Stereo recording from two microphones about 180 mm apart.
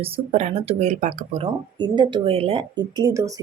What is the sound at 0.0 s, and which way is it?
Speech, 35° right (ahead or behind).